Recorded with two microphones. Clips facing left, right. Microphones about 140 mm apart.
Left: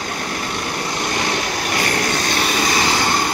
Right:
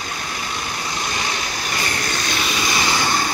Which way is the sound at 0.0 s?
55° left (ahead or behind).